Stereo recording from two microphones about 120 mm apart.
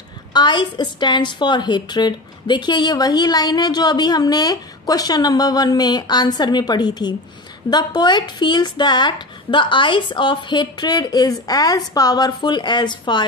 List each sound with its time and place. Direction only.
0.3 s a woman's voice: 40° left (ahead or behind)